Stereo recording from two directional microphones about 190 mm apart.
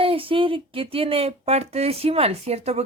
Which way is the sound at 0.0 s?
30° right (ahead or behind).